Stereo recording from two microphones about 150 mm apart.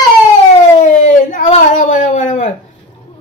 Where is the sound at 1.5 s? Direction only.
50° left (ahead or behind).